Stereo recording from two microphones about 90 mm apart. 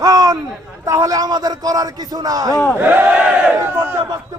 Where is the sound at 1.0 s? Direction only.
45° right (ahead or behind).